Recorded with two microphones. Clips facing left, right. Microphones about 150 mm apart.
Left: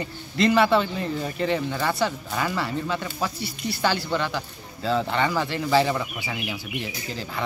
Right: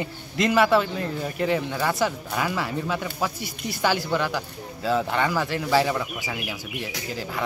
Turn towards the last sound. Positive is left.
turn(degrees=-5)  # may be behind; listen again after turning